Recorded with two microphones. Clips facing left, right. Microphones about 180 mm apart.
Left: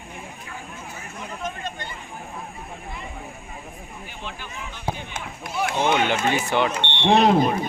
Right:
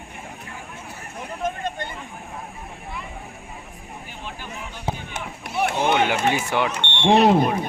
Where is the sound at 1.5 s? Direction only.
50° right (ahead or behind).